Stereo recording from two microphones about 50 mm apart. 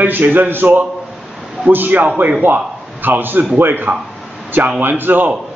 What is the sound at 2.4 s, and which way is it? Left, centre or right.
A man's voice, right.